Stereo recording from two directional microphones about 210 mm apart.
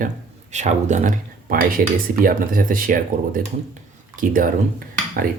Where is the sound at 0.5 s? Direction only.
35° right (ahead or behind).